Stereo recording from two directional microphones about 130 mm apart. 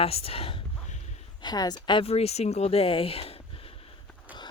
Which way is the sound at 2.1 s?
55° left (ahead or behind).